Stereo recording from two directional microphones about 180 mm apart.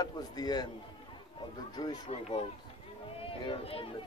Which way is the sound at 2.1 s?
40° left (ahead or behind).